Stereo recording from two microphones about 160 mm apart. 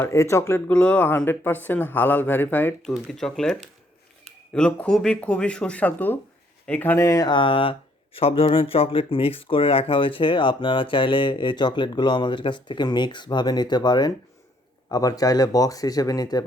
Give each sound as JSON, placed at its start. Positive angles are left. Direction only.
{"t": 0.0, "sound": "speech", "side_deg": 15}